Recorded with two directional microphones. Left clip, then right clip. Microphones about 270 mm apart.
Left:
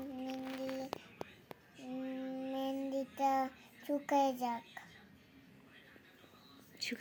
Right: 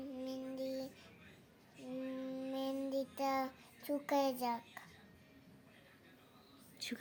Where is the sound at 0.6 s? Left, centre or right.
Right.